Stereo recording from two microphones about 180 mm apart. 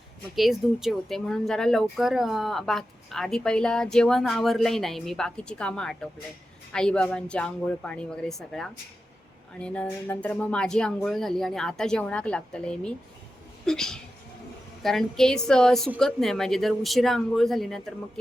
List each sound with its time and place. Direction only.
0.3 s speech: centre (ahead or behind)